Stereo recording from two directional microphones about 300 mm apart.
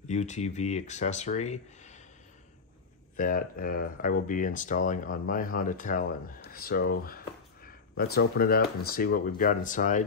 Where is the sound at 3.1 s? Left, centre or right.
Left.